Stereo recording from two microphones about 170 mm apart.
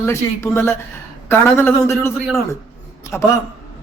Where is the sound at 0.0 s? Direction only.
15° left (ahead or behind).